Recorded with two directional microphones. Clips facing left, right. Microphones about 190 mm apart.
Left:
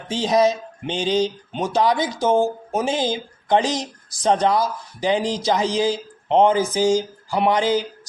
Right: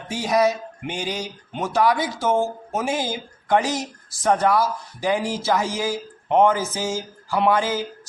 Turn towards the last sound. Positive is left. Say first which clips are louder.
# left 2 dB
turn(degrees=15)  # may be behind; listen again after turning